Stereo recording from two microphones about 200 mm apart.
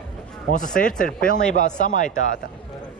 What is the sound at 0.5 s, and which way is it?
Speech, 40° left (ahead or behind).